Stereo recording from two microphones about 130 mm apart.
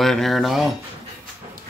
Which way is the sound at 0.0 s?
Centre (ahead or behind).